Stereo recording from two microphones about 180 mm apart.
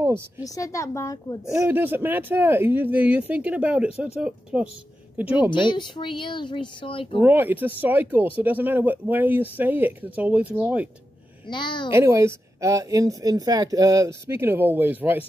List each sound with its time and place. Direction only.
0.4 s a woman's voice: 15° left (ahead or behind)
1.7 s speech: 10° right (ahead or behind)
5.5 s speech: 25° left (ahead or behind)
7.2 s speech: 10° right (ahead or behind)
11.4 s speech: 25° left (ahead or behind)
11.9 s speech: 15° right (ahead or behind)